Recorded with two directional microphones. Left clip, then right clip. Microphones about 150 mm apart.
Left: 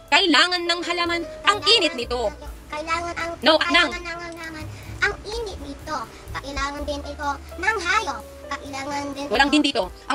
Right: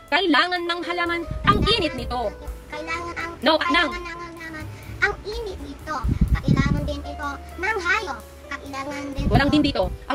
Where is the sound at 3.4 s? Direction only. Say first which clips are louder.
Left 2 dB; 35° right (ahead or behind).